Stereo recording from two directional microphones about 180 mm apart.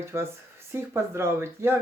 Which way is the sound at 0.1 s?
15° right (ahead or behind).